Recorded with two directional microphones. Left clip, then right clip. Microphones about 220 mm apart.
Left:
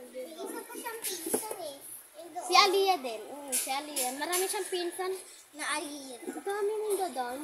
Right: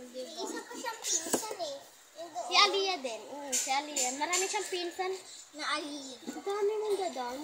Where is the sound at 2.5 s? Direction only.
25° left (ahead or behind).